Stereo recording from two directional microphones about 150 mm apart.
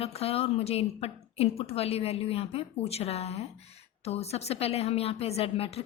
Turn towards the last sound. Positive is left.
turn(degrees=40)  # may be behind; listen again after turning